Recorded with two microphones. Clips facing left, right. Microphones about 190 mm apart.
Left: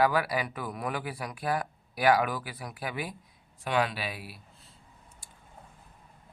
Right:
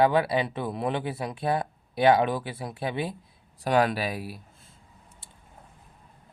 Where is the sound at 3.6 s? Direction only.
45° right (ahead or behind).